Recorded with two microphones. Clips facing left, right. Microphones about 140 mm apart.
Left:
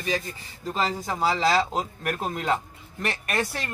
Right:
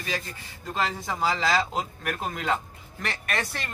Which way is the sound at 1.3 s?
25° left (ahead or behind).